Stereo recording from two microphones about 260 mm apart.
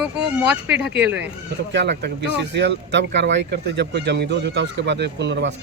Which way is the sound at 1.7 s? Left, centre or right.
Right.